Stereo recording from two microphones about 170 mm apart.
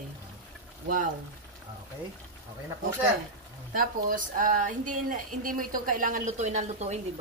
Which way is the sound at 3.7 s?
55° right (ahead or behind).